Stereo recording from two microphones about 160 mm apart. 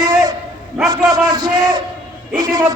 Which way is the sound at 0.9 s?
25° right (ahead or behind).